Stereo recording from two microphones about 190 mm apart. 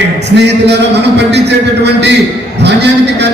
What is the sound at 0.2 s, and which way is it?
A man's voice, 65° right (ahead or behind).